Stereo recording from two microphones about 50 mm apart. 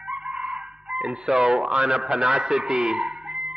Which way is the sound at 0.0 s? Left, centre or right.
Centre.